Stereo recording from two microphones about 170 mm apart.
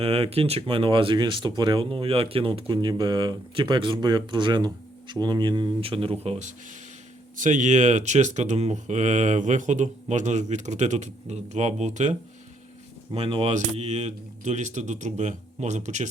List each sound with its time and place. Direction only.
0.0 s speech: 35° right (ahead or behind)
13.1 s speech: 30° right (ahead or behind)